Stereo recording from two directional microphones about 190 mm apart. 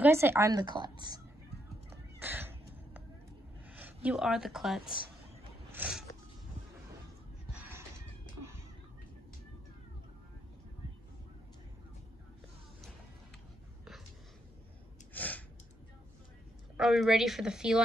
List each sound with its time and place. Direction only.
0.0 s a woman's voice: 10° right (ahead or behind)
2.1 s crow: 10° right (ahead or behind)
3.7 s a woman's voice: 10° right (ahead or behind)
5.7 s a sound: 5° right (ahead or behind)
7.5 s cat: 10° right (ahead or behind)
15.1 s a sound: 10° left (ahead or behind)
16.7 s a woman's voice: centre (ahead or behind)